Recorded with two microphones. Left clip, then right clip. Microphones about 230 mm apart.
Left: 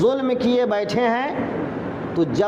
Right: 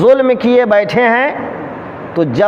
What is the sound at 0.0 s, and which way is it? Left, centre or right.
A man's voice, right.